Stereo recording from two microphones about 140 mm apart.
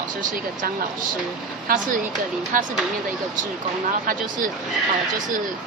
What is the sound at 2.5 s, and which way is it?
Speech, 75° right (ahead or behind).